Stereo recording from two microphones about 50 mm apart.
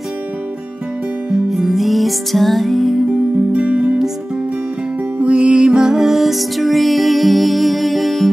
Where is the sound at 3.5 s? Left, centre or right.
Right.